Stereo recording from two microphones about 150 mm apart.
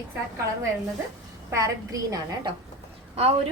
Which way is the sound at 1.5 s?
20° right (ahead or behind).